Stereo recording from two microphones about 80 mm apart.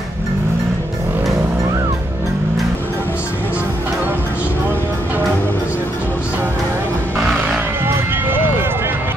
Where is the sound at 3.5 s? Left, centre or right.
Right.